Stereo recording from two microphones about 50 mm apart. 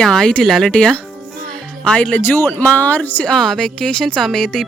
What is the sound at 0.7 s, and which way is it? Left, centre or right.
Speech, centre.